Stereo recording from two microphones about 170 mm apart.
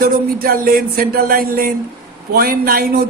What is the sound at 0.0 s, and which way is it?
A man's voice, 60° right (ahead or behind).